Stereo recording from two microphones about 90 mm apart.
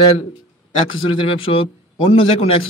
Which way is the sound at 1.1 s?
85° left.